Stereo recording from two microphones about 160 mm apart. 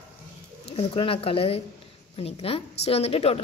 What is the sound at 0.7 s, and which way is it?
A woman's voice, 35° left (ahead or behind).